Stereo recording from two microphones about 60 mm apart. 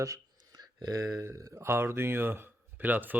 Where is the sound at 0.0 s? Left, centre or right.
Right.